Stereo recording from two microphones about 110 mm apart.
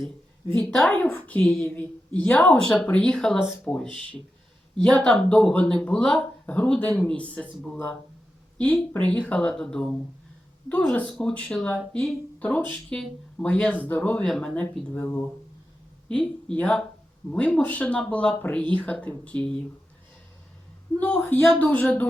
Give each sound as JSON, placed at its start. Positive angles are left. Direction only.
{"t": 0.5, "sound": "speech", "side_deg": 5}
{"t": 14.6, "sound": "speech", "side_deg": 20}
{"t": 20.9, "sound": "speech", "side_deg": 15}